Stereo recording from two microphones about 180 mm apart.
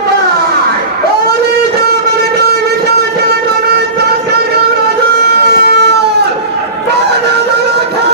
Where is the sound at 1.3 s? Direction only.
60° right (ahead or behind).